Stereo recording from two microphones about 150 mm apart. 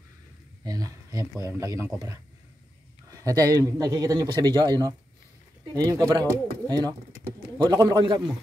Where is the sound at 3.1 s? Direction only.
25° right (ahead or behind).